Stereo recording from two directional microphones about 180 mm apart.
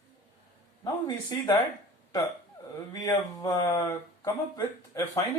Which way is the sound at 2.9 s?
20° left (ahead or behind).